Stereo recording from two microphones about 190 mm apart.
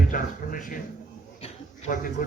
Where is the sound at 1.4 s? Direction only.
40° left (ahead or behind).